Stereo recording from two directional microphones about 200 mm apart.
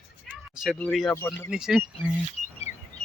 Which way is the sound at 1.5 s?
5° right (ahead or behind).